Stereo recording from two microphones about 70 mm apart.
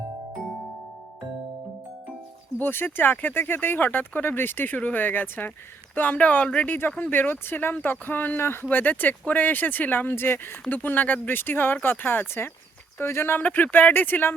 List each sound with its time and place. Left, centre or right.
2.6 s speech: left